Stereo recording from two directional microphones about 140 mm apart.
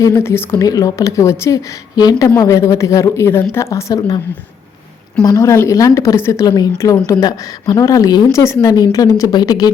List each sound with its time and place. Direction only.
0.0 s a woman's voice: 20° left (ahead or behind)
5.2 s a woman's voice: 25° left (ahead or behind)